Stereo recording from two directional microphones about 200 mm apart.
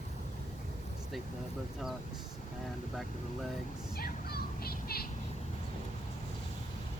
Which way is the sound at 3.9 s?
50° left (ahead or behind).